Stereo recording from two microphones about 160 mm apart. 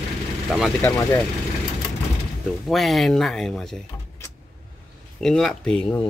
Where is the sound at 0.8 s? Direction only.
15° left (ahead or behind).